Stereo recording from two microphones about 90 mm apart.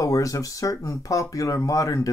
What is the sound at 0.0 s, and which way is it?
Speech, 40° left (ahead or behind).